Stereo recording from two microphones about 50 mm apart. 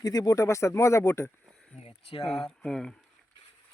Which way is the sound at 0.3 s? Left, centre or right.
Left.